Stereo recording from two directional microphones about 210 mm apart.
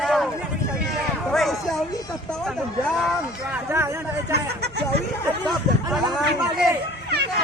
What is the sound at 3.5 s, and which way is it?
Speech, 10° right (ahead or behind).